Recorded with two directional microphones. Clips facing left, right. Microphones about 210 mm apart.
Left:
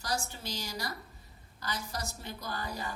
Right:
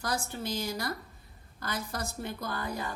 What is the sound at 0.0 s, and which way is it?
A woman's voice, 55° right (ahead or behind).